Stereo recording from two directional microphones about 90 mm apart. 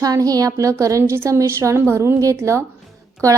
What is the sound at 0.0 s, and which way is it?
A woman's voice, 40° right (ahead or behind).